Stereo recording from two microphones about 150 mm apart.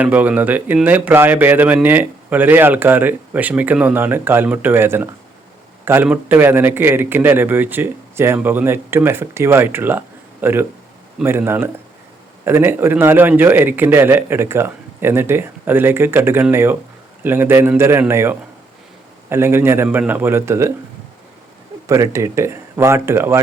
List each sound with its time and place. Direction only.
0.0 s a man's voice: 10° right (ahead or behind)
21.8 s a man's voice: 20° right (ahead or behind)